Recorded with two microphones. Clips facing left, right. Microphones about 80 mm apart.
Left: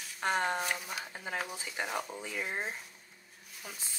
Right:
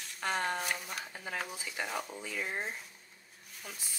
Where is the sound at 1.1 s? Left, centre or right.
Centre.